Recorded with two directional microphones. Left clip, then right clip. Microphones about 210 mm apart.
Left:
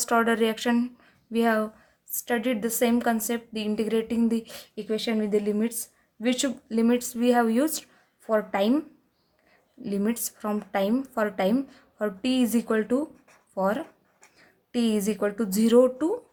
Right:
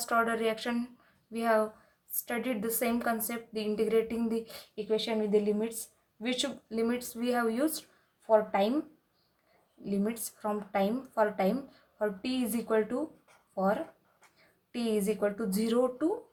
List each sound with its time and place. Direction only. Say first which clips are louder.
0.0 s a woman's voice: left 6 dB; 40° left (ahead or behind)
9.8 s a woman's voice: left 5 dB; 40° left (ahead or behind)
14.3 s a woman's voice: left 10 dB; 40° left (ahead or behind)